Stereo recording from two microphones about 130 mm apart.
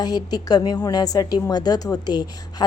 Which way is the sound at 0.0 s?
30° left (ahead or behind).